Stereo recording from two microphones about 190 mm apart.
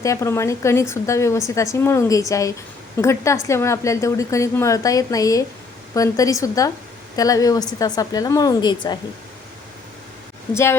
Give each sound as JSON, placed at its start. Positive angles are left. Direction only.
{"t": 0.0, "sound": "a woman's voice", "side_deg": 15}
{"t": 10.5, "sound": "a woman's voice", "side_deg": 15}